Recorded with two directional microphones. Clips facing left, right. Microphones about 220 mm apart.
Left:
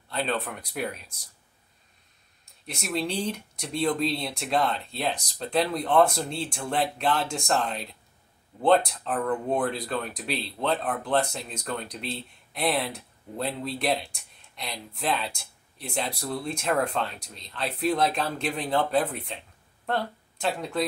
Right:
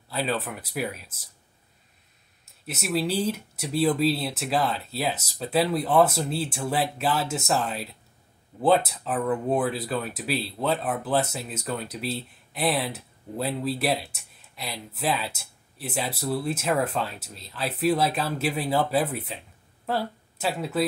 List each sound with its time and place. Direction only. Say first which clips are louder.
0.1 s speech: right 1 dB; 5° right (ahead or behind)
2.4 s speech: right 3 dB; 5° right (ahead or behind)